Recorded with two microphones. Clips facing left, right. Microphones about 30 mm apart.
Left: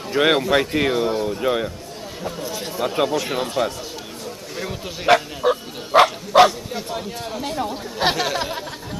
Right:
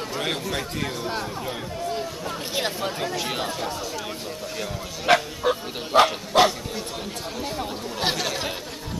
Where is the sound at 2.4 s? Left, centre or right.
Right.